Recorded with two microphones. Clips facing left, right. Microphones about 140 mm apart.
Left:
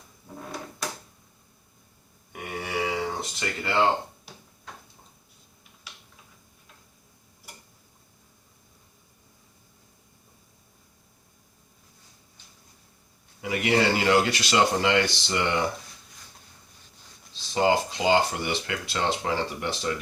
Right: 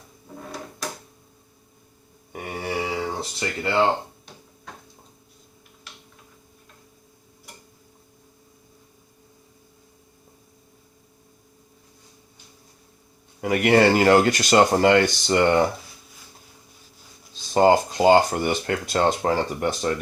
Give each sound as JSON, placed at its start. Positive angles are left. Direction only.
{"t": 0.3, "sound": "drawer open or close", "side_deg": 0}
{"t": 2.3, "sound": "grunt", "side_deg": -35}
{"t": 3.2, "sound": "speech", "side_deg": -30}
{"t": 4.3, "sound": "a sound", "side_deg": 5}
{"t": 13.4, "sound": "speech", "side_deg": -55}
{"t": 17.3, "sound": "speech", "side_deg": -45}